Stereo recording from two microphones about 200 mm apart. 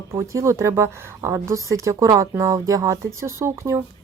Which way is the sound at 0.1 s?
15° right (ahead or behind).